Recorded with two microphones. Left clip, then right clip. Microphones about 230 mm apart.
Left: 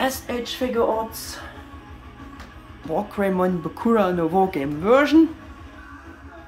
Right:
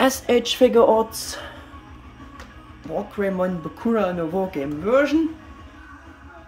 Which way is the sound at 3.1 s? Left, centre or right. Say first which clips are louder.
Even; centre.